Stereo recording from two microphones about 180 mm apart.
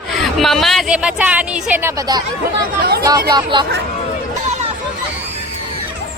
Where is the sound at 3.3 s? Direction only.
25° right (ahead or behind).